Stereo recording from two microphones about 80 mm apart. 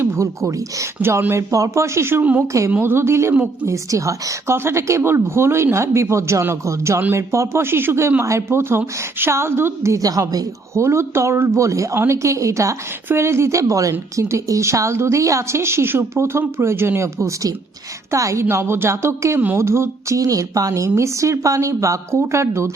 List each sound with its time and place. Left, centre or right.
0.0 s a woman's voice: right
2.7 s a woman's voice: right
3.3 s a woman's voice: centre
3.7 s a woman's voice: right
10.8 s a woman's voice: right